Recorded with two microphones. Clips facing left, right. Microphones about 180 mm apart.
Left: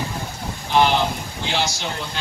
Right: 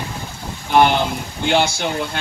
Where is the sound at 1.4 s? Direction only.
55° right (ahead or behind).